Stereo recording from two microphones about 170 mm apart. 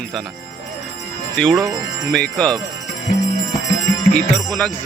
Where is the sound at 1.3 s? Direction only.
Centre (ahead or behind).